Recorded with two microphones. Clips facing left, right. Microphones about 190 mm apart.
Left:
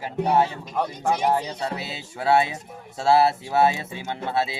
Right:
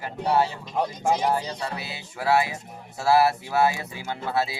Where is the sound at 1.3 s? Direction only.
25° left (ahead or behind).